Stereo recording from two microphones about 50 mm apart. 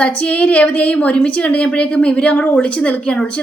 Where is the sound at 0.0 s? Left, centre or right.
Left.